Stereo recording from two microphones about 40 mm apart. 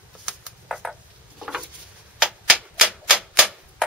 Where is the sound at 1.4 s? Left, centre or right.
Centre.